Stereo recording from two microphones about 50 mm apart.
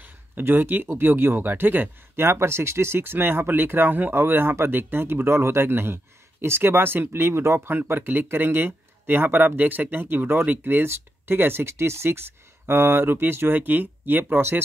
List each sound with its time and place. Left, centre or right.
0.0 s speech: right
2.2 s speech: right
7.4 s speech: right
7.7 s speech: right